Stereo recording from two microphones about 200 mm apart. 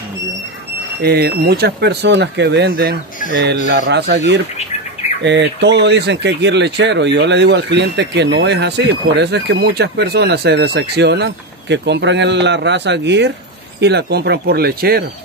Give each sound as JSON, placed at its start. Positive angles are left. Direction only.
{"t": 1.0, "sound": "speech", "side_deg": -50}
{"t": 3.3, "sound": "speech", "side_deg": -70}